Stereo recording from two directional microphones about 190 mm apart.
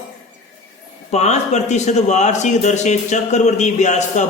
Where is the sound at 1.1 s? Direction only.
35° left (ahead or behind).